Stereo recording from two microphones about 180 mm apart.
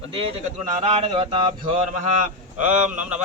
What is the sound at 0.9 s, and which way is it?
Speech, 35° right (ahead or behind).